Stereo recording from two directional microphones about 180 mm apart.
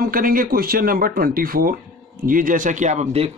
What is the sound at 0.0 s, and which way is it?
Speech, 50° right (ahead or behind).